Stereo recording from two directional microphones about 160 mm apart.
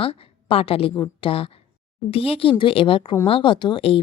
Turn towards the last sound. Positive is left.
turn(degrees=35)  # may be behind; listen again after turning